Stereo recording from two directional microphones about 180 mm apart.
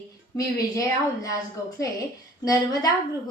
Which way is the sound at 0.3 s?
20° left (ahead or behind).